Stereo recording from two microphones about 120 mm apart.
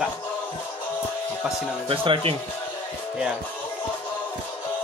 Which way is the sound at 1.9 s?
50° right (ahead or behind).